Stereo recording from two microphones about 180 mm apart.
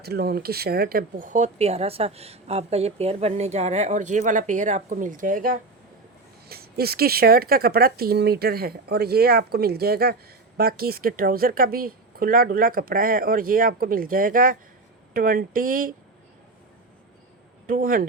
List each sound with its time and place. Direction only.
0.0 s speech: 60° right (ahead or behind)
17.7 s speech: 50° right (ahead or behind)